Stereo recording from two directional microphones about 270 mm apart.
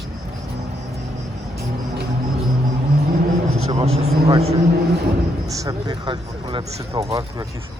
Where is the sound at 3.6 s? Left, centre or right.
Right.